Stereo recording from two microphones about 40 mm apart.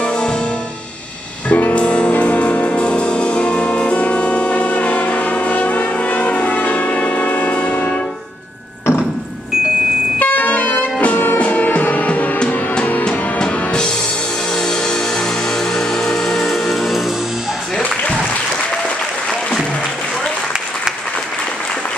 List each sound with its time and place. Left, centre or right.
1.5 s music: left
1.8 s music: left
10.1 s music: left
13.4 s music: centre
15.7 s music: centre
16.4 s music: centre